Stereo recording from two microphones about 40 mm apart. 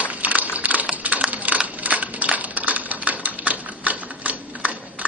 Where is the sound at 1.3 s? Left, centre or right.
Right.